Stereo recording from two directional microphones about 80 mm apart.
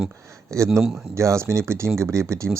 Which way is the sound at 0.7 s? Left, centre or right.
Centre.